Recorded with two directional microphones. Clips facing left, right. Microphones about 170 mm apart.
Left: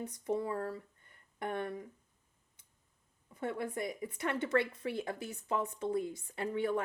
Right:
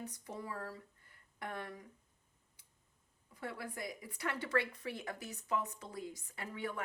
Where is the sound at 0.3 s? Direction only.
25° left (ahead or behind).